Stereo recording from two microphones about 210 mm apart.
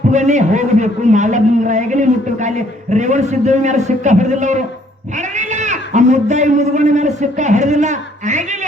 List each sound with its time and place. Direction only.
0.1 s a man's voice: 35° right (ahead or behind)